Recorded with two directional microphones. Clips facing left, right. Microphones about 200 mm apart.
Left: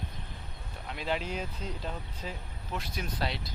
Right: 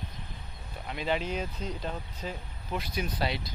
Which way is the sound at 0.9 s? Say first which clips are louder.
Right 3 dB; centre (ahead or behind).